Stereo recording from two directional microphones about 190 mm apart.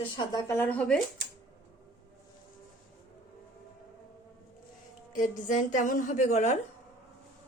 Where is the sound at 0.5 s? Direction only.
10° left (ahead or behind).